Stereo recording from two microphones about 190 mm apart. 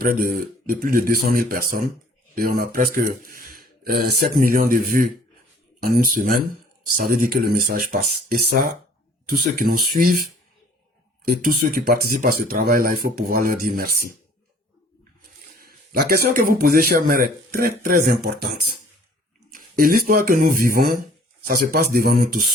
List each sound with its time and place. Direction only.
0.0 s speech: 50° right (ahead or behind)
11.4 s speech: 50° right (ahead or behind)
15.5 s speech: 50° right (ahead or behind)